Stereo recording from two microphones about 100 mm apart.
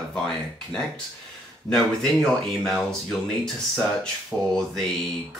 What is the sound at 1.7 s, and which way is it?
Speech, 5° left (ahead or behind).